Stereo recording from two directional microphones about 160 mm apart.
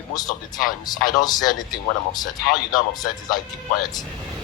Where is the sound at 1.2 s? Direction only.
25° left (ahead or behind).